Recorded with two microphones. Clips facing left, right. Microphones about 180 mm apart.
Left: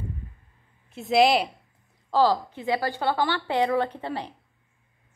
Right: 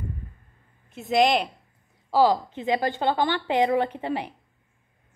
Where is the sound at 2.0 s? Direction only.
15° right (ahead or behind).